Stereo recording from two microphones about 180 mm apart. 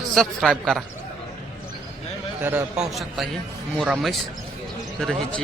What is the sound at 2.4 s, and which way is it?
A man's voice, 10° right (ahead or behind).